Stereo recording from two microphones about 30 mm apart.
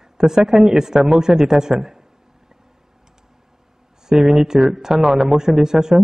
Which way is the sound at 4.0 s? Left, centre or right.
Centre.